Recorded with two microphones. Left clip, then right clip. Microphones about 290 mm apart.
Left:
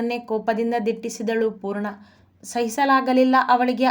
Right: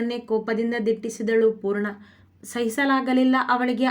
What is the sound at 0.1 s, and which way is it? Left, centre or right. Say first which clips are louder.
Speech: left 2 dB; left.